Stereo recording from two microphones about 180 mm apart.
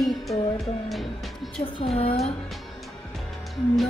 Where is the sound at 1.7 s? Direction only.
35° left (ahead or behind).